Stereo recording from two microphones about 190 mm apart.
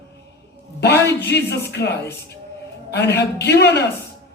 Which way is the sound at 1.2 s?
60° left (ahead or behind).